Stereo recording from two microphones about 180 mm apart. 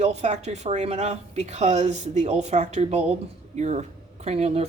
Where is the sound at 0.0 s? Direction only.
40° right (ahead or behind).